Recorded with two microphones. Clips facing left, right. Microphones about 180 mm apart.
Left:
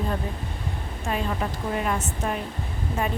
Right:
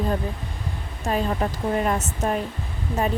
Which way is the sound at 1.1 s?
40° right (ahead or behind).